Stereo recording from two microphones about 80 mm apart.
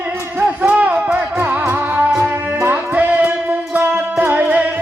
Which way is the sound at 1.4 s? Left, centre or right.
Right.